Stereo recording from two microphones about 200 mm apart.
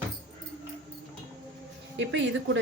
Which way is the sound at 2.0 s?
65° right (ahead or behind).